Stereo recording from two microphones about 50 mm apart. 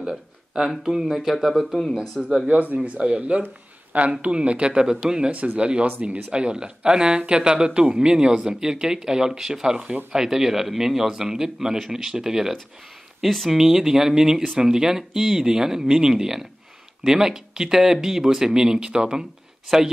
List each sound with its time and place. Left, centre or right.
0.6 s speech: centre
2.2 s speech: right
5.3 s speech: right